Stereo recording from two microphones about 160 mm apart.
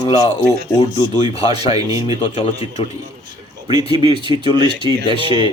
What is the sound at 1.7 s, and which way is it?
Speech, 25° right (ahead or behind).